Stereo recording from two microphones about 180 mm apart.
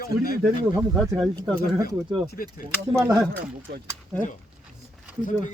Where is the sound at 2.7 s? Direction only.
20° right (ahead or behind).